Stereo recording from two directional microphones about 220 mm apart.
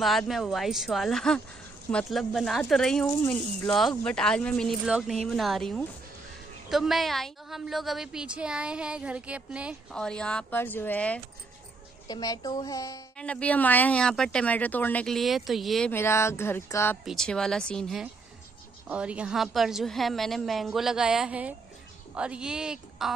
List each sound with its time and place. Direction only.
0.0 s a woman's voice: centre (ahead or behind)